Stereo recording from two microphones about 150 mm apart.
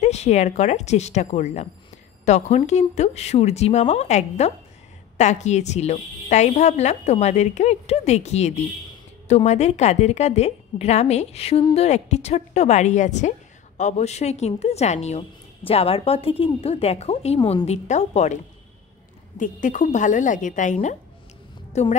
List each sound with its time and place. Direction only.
0.0 s a woman's voice: 45° left (ahead or behind)